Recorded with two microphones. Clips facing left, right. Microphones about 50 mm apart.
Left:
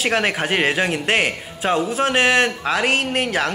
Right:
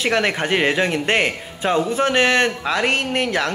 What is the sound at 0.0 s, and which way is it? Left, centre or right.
Speech, centre.